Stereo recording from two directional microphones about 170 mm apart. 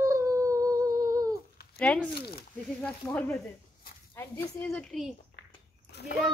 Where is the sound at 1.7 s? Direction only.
10° left (ahead or behind).